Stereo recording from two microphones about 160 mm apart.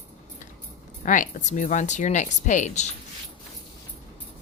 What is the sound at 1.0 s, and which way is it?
Speech, 55° left (ahead or behind).